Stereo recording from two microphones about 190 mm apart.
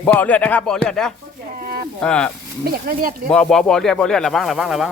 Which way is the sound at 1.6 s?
50° right (ahead or behind).